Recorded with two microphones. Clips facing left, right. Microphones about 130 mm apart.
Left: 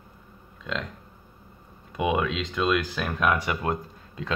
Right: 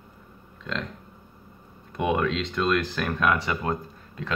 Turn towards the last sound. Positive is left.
turn(degrees=10)  # may be behind; listen again after turning